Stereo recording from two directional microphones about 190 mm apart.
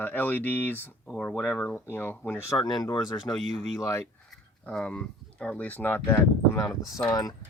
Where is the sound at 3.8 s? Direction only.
15° left (ahead or behind).